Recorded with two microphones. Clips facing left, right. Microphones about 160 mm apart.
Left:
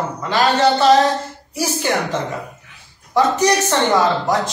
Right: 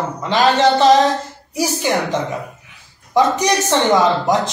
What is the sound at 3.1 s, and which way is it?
Speech, 15° right (ahead or behind).